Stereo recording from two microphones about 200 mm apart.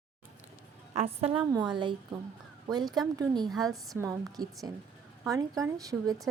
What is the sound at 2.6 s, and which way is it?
Speech, 20° right (ahead or behind).